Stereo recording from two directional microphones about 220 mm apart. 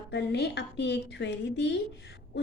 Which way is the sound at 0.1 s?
50° left (ahead or behind).